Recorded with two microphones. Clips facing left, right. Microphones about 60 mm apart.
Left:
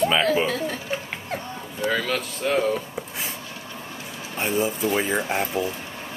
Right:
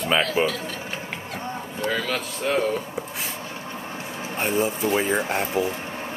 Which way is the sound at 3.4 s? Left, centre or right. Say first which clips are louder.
Right 3 dB; right.